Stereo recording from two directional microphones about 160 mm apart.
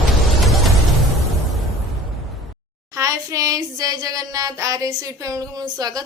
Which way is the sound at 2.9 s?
20° right (ahead or behind).